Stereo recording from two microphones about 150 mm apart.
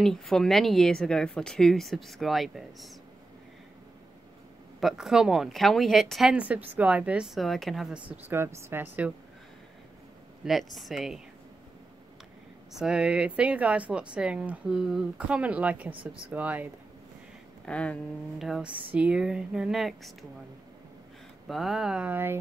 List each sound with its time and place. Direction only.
0.0 s speech: centre (ahead or behind)
4.7 s speech: centre (ahead or behind)
8.1 s speech: 15° right (ahead or behind)
10.4 s speech: centre (ahead or behind)
12.7 s speech: 5° right (ahead or behind)
15.9 s speech: 35° right (ahead or behind)
16.3 s speech: 10° right (ahead or behind)
17.6 s speech: 10° left (ahead or behind)
18.4 s speech: 5° right (ahead or behind)
21.5 s speech: centre (ahead or behind)